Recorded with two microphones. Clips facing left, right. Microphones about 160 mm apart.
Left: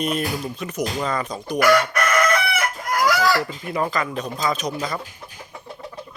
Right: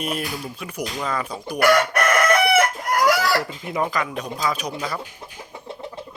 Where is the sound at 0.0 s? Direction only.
10° right (ahead or behind).